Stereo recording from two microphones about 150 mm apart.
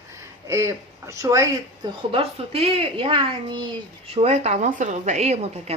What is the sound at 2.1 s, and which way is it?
Speech, 40° right (ahead or behind).